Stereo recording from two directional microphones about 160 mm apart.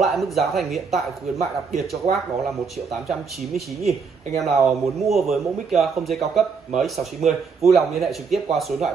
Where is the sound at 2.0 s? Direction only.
45° right (ahead or behind).